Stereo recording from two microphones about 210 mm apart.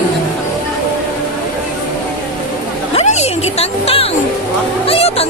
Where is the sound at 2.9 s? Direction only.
30° left (ahead or behind).